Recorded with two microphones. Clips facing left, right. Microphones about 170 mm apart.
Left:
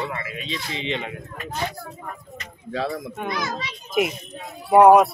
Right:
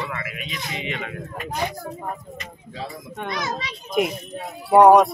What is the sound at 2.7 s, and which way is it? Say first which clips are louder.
Speech: left 7 dB; 70° left (ahead or behind).